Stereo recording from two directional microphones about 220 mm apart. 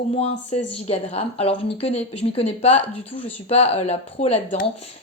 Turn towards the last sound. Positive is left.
turn(degrees=30)  # may be behind; listen again after turning